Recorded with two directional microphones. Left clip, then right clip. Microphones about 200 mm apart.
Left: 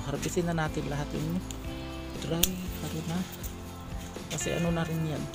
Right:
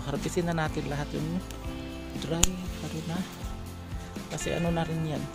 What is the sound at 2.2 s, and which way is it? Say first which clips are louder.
Speech: right 1 dB; centre (ahead or behind).